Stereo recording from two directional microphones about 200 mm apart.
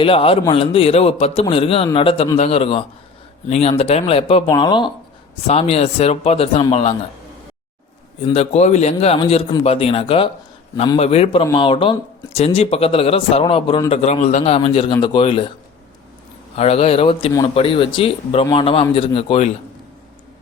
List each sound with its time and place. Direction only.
0.0 s a man's voice: 25° left (ahead or behind)
8.3 s a man's voice: 30° left (ahead or behind)
16.6 s a man's voice: 30° left (ahead or behind)